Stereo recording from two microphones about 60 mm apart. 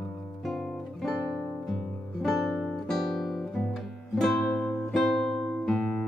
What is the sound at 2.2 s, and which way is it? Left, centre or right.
Guitar, centre.